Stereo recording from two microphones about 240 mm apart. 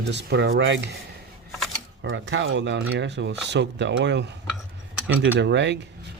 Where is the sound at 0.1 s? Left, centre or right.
Right.